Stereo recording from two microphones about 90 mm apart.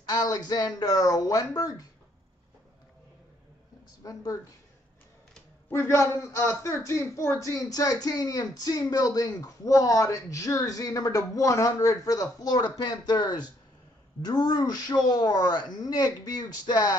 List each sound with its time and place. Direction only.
0.0 s a man's voice: 45° left (ahead or behind)
4.0 s speech: 40° left (ahead or behind)
5.7 s a man's voice: 30° left (ahead or behind); by 16.9 s 50° left (ahead or behind)